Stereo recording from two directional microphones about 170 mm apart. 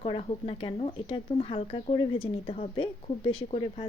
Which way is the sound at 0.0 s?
35° left (ahead or behind).